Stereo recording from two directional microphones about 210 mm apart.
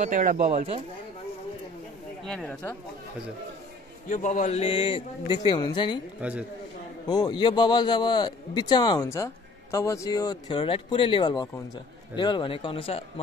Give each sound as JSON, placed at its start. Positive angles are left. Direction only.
{"t": 0.0, "sound": "speech", "side_deg": -40}
{"t": 2.2, "sound": "speech", "side_deg": 5}
{"t": 4.1, "sound": "a man's voice", "side_deg": 35}
{"t": 7.1, "sound": "a man's voice", "side_deg": 20}